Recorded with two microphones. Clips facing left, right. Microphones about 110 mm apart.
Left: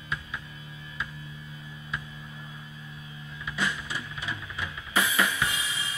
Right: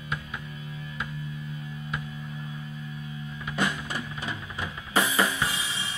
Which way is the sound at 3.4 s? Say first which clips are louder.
Right 2 dB; 45° right (ahead or behind).